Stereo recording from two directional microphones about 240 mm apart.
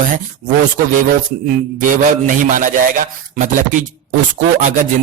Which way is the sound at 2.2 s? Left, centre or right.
Right.